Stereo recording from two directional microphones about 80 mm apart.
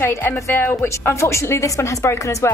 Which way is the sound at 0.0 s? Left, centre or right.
Left.